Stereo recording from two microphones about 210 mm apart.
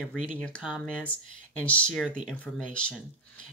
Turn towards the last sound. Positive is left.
turn(degrees=5)  # may be behind; listen again after turning